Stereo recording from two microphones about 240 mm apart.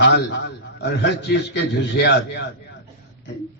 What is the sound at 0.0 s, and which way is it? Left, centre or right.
A man's voice, left.